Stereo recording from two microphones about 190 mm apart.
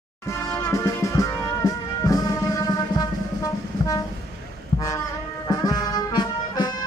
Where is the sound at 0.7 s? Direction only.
15° left (ahead or behind).